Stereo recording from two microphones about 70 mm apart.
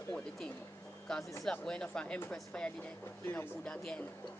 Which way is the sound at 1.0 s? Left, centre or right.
Centre.